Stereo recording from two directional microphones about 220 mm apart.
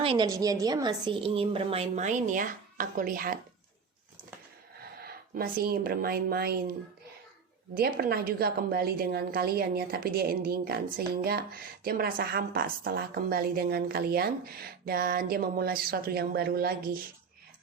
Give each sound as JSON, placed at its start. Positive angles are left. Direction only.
{"t": 0.0, "sound": "a woman's voice", "side_deg": -20}
{"t": 4.8, "sound": "speech", "side_deg": -45}
{"t": 7.8, "sound": "a woman's voice", "side_deg": -45}